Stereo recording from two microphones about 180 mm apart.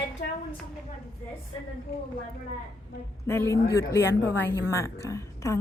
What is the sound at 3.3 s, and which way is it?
A woman's voice, 15° left (ahead or behind).